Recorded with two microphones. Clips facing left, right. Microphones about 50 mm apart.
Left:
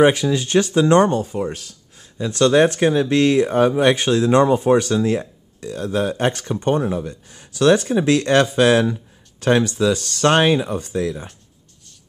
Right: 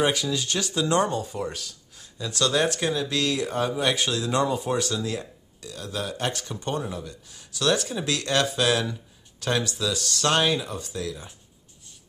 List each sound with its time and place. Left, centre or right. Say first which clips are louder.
0.0 s speech: left 9 dB; left
1.2 s speech: left 7 dB; left